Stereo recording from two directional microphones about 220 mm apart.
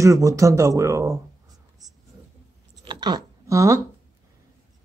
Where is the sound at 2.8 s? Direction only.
20° right (ahead or behind).